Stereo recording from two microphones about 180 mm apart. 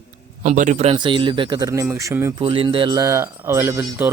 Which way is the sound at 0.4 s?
45° right (ahead or behind).